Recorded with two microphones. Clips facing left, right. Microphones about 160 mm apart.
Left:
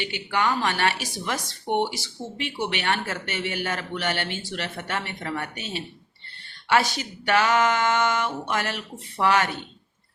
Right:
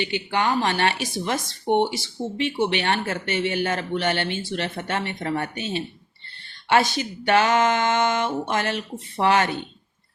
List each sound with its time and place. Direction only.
0.0 s a man's voice: 25° right (ahead or behind)
7.3 s a man's voice: 25° right (ahead or behind)